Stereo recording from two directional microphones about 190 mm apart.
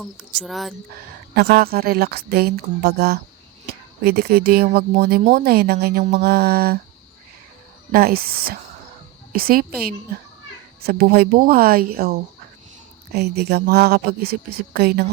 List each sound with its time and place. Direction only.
0.0 s speech: centre (ahead or behind)
1.4 s a woman's voice: 55° right (ahead or behind)
6.2 s speech: 55° right (ahead or behind)
7.9 s a woman's voice: 50° right (ahead or behind)